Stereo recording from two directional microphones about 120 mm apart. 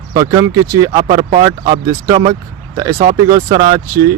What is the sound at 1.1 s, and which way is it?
Speech, 50° right (ahead or behind).